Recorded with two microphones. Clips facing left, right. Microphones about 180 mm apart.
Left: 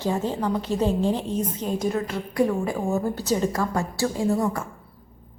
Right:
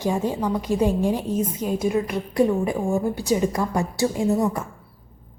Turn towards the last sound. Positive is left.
turn(degrees=-20)  # may be behind; listen again after turning